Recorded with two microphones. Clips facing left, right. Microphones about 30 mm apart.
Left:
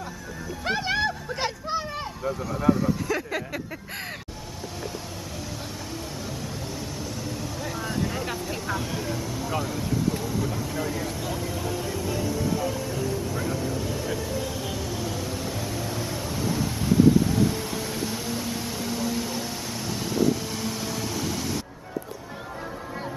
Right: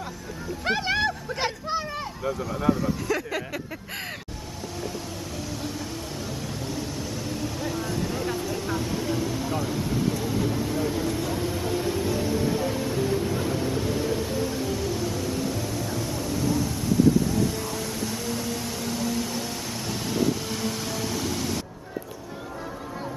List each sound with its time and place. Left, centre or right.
0.7 s a sound: centre
2.2 s speech: centre
7.2 s vehicle: centre
8.6 s speech: centre
9.7 s vehicle: centre
12.2 s music: right
14.6 s music: centre
14.9 s a sound: centre